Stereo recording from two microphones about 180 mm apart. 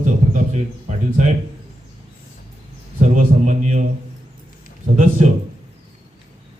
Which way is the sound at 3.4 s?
40° right (ahead or behind).